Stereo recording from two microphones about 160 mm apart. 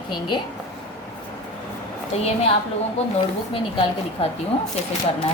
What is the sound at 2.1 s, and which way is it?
Speech, 40° left (ahead or behind).